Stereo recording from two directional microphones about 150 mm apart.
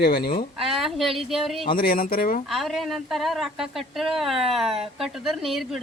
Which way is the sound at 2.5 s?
Centre (ahead or behind).